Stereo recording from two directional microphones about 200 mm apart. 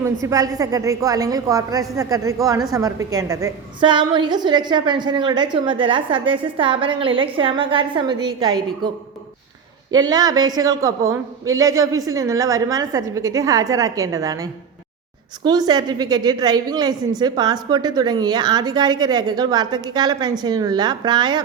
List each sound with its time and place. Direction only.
0.0 s a woman's voice: 15° right (ahead or behind)
9.9 s a woman's voice: 20° right (ahead or behind)